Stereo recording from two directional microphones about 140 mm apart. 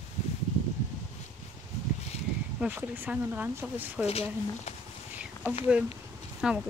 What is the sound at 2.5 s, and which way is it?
Speech, 15° right (ahead or behind).